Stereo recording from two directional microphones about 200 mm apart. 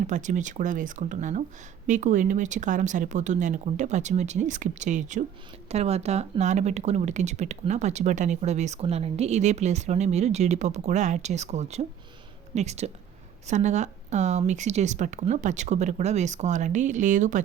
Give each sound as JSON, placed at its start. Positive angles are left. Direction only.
{"t": 0.1, "sound": "speech", "side_deg": -40}